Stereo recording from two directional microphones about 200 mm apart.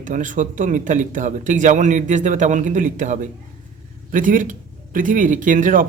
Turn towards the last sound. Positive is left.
turn(degrees=-40)  # may be behind; listen again after turning